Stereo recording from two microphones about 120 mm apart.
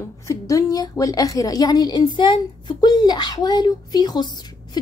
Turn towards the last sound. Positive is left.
turn(degrees=35)  # may be behind; listen again after turning